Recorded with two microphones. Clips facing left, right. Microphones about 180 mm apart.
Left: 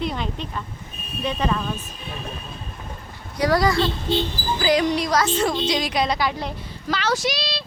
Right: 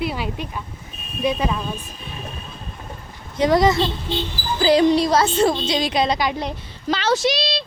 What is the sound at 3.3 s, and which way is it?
A woman's voice, 20° right (ahead or behind).